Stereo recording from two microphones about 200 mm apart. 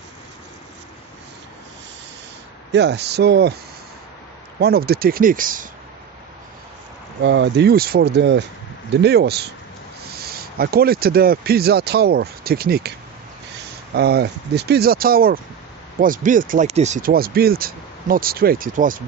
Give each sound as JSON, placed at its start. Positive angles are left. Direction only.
{"t": 2.7, "sound": "speech", "side_deg": -55}
{"t": 4.6, "sound": "speech", "side_deg": -50}
{"t": 7.2, "sound": "speech", "side_deg": -60}
{"t": 13.9, "sound": "speech", "side_deg": -55}